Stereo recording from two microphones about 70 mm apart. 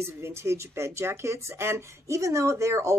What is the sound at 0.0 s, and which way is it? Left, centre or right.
A woman's voice, right.